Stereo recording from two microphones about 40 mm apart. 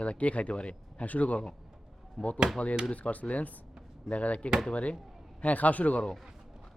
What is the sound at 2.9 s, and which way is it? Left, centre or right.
Speech, left.